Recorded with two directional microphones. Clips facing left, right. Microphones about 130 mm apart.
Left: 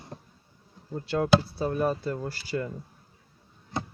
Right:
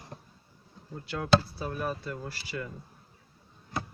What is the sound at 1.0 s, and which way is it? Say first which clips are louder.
Speech: left 3 dB; 30° left (ahead or behind).